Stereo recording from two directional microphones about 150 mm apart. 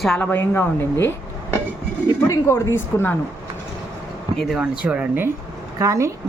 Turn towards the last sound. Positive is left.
turn(degrees=-20)  # may be behind; listen again after turning